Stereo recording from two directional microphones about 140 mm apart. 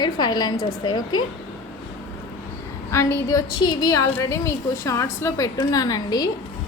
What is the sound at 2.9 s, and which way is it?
A woman's voice, 20° left (ahead or behind).